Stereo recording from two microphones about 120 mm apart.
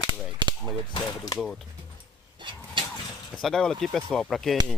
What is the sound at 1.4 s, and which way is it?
Speech, centre (ahead or behind).